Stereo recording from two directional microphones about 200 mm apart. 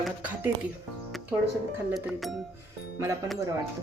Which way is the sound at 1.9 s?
Centre (ahead or behind).